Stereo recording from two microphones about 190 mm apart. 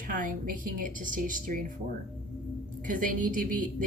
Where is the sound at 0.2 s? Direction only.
45° right (ahead or behind).